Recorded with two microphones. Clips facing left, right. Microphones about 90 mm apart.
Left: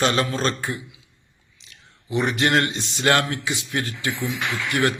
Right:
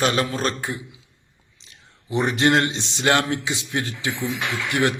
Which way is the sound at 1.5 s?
35° right (ahead or behind).